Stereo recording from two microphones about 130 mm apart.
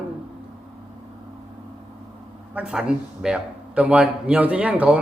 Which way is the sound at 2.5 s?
10° right (ahead or behind).